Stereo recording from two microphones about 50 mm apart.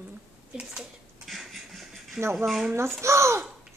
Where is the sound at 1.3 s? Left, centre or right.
Centre.